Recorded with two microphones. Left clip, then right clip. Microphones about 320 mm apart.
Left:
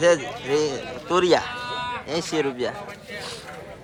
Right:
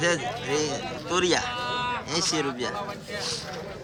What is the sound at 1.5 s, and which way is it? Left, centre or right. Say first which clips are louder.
Livestock: right 1 dB; right.